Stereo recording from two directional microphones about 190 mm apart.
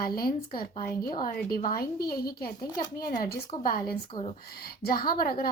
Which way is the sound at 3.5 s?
20° left (ahead or behind).